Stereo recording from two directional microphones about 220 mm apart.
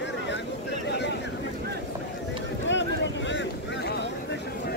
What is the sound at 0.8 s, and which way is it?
Vehicle, 50° left (ahead or behind).